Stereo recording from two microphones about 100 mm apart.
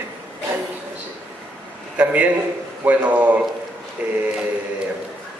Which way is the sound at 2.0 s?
15° right (ahead or behind).